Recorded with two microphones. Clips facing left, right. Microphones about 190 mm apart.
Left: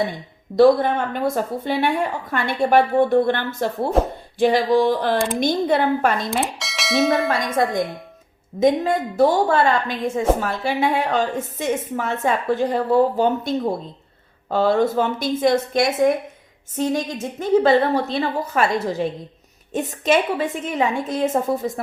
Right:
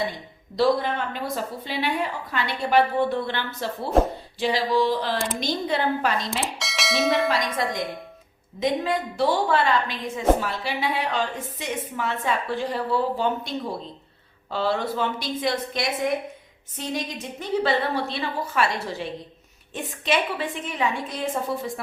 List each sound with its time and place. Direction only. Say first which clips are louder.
0.5 s a woman's voice: left 7 dB; 50° left (ahead or behind)
6.4 s speech: left 3 dB; centre (ahead or behind)
7.3 s a woman's voice: left 4 dB; 50° left (ahead or behind)